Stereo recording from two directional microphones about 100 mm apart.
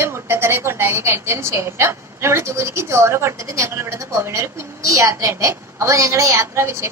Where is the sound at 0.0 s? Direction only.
25° right (ahead or behind).